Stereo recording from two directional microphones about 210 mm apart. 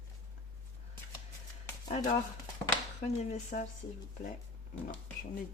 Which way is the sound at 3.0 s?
35° left (ahead or behind).